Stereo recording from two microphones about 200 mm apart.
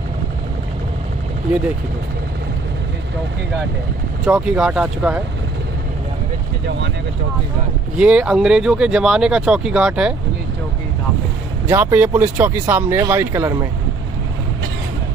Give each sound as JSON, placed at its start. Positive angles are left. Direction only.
{"t": 4.3, "sound": "speech", "side_deg": -5}
{"t": 8.0, "sound": "speech", "side_deg": -5}
{"t": 11.6, "sound": "speech", "side_deg": -10}